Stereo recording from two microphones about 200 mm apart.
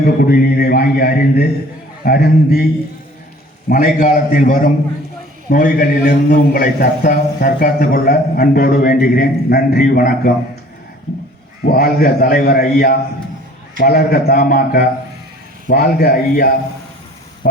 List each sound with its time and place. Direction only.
0.0 s a man's voice: 45° left (ahead or behind)
3.7 s a man's voice: 45° left (ahead or behind)
11.6 s a man's voice: 50° left (ahead or behind)